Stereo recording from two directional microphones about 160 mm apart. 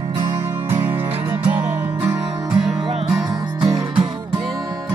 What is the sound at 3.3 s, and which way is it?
Music, 25° right (ahead or behind).